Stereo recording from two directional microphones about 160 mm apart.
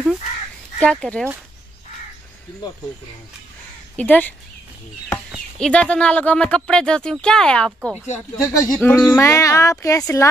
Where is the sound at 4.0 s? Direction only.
10° left (ahead or behind).